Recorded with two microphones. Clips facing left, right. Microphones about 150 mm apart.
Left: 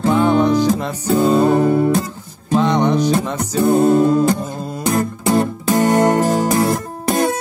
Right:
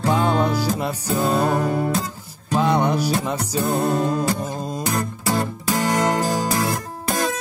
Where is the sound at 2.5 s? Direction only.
10° right (ahead or behind).